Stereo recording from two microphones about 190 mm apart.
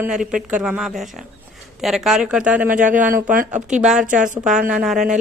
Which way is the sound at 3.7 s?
5° right (ahead or behind).